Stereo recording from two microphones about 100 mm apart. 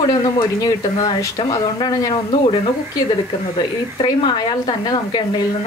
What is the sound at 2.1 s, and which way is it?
Speech, 70° left (ahead or behind).